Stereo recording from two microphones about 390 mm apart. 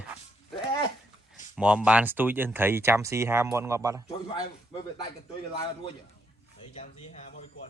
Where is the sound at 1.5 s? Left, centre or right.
Centre.